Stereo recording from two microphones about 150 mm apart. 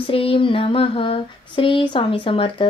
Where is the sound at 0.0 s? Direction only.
35° left (ahead or behind).